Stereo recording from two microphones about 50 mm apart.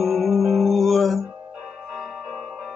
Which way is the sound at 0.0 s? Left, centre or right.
Centre.